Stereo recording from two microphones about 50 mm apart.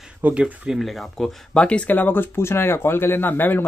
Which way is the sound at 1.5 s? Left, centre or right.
Left.